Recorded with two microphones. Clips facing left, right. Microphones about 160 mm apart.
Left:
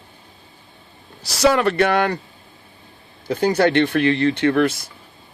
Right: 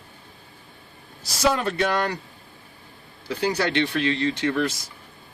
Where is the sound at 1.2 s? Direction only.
75° left (ahead or behind).